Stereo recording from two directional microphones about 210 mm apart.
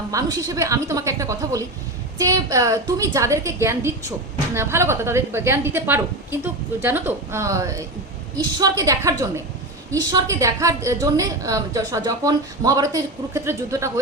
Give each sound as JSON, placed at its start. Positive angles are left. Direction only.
{"t": 0.1, "sound": "a woman's voice", "side_deg": -15}